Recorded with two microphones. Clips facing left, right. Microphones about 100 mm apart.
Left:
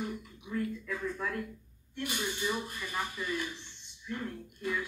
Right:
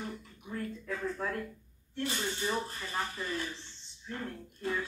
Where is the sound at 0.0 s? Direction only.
15° left (ahead or behind).